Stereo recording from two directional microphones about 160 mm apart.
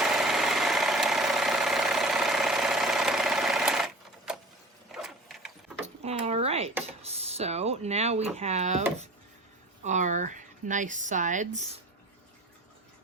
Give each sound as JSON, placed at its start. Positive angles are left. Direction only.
{"t": 0.0, "sound": "engine", "side_deg": 0}
{"t": 4.9, "sound": "printer", "side_deg": 0}
{"t": 5.8, "sound": "drawer open or close", "side_deg": -40}
{"t": 7.0, "sound": "a sound", "side_deg": -40}
{"t": 9.8, "sound": "speech", "side_deg": -50}